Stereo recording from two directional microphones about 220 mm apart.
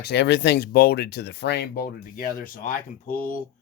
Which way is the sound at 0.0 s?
50° left (ahead or behind).